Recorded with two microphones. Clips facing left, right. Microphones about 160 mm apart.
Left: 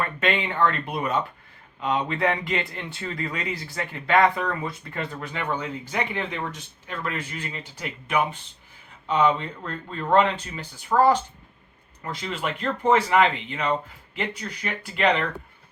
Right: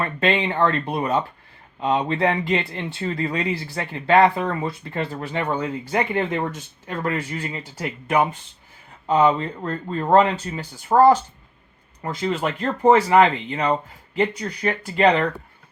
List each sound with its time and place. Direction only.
0.0 s speech: 30° right (ahead or behind)